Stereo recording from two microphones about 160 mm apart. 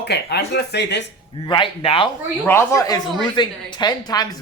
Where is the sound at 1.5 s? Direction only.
35° left (ahead or behind).